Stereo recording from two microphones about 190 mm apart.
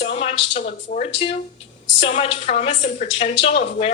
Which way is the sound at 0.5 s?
40° left (ahead or behind).